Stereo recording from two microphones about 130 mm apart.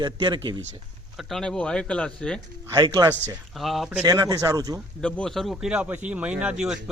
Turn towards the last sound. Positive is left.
turn(degrees=-5)  # may be behind; listen again after turning